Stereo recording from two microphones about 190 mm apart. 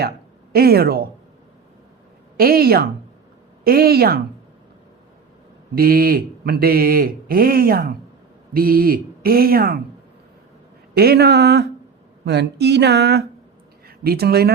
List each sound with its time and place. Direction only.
0.5 s speech: 55° right (ahead or behind)
2.4 s speech: 50° right (ahead or behind)
5.7 s speech: 50° right (ahead or behind)
10.9 s speech: 55° right (ahead or behind)